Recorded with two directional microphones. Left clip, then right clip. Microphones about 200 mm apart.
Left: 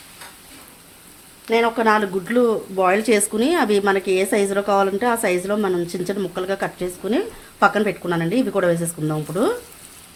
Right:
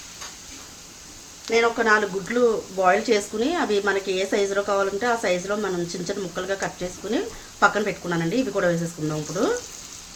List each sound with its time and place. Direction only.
1.5 s speech: 55° left (ahead or behind)